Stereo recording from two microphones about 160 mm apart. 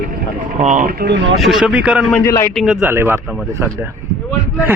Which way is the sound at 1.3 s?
Centre (ahead or behind).